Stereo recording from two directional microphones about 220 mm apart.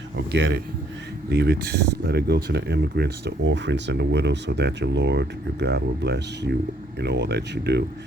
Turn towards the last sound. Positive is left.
turn(degrees=-50)  # may be behind; listen again after turning